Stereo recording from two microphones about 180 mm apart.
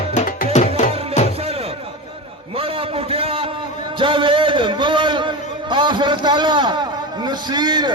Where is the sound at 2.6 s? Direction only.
30° right (ahead or behind).